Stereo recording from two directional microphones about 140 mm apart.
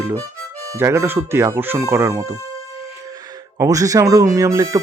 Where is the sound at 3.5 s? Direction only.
25° right (ahead or behind).